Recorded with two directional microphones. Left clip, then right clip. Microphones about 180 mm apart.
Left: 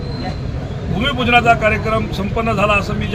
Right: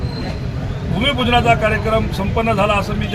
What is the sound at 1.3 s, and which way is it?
A man's voice, centre (ahead or behind).